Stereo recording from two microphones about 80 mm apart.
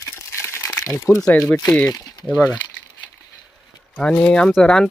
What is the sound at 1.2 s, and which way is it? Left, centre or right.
Speech, centre.